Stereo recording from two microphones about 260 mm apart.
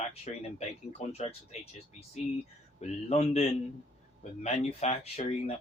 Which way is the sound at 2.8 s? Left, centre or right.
Left.